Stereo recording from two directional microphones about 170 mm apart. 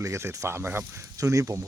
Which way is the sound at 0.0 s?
15° right (ahead or behind).